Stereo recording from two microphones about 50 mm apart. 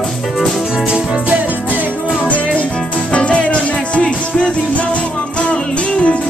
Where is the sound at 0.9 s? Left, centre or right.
Right.